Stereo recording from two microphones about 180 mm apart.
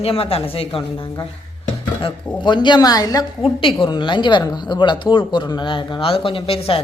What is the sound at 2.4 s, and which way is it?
A woman's voice, 25° left (ahead or behind).